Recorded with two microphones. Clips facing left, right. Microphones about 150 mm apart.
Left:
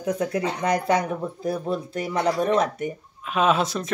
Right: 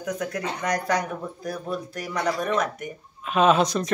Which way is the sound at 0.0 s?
30° left (ahead or behind).